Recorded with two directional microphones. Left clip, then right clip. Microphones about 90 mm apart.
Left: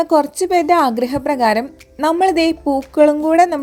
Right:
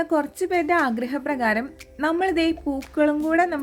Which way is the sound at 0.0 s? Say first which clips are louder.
Left 9 dB; 35° left (ahead or behind).